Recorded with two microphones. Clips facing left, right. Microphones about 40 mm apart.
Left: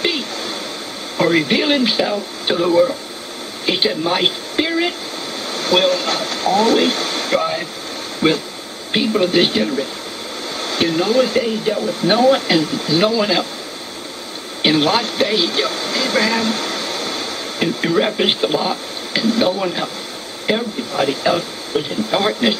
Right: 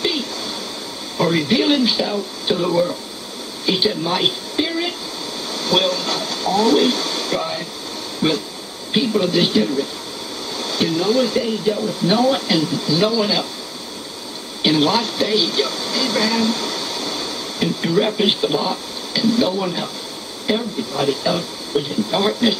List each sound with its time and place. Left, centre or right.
1.2 s speech: left
5.5 s speech: left
7.3 s air conditioning: left
8.2 s speech: left
14.6 s a sound: left
17.8 s speech: left
19.1 s speech: left